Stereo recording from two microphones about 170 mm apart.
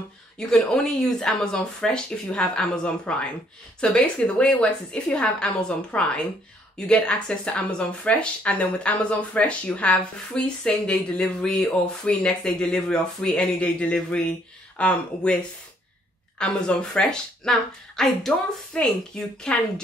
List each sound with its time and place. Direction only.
0.4 s speech: 5° left (ahead or behind)
16.3 s speech: 5° left (ahead or behind)